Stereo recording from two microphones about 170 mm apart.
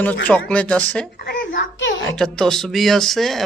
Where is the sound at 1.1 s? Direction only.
60° left (ahead or behind); by 1.9 s 90° left.